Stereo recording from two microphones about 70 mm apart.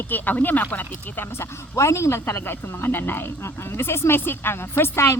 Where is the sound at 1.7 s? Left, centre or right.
Left.